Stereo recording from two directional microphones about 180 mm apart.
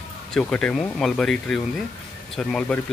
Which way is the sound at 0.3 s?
5° left (ahead or behind).